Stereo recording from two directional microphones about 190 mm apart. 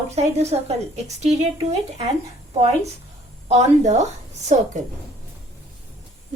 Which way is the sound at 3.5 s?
35° right (ahead or behind).